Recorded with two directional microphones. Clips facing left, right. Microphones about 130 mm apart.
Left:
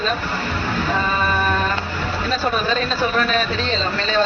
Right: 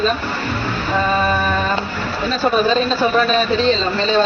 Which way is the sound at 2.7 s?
25° right (ahead or behind).